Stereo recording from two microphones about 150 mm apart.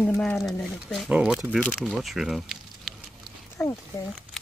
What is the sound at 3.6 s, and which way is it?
Speech, 20° left (ahead or behind).